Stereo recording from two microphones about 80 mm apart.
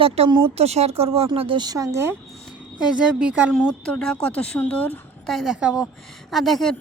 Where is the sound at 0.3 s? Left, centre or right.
Right.